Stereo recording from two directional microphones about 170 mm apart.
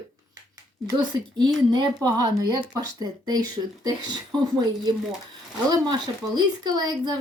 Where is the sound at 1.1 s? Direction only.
20° right (ahead or behind).